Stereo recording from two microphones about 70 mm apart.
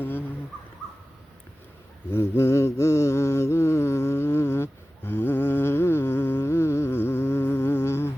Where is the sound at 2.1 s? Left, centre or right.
Left.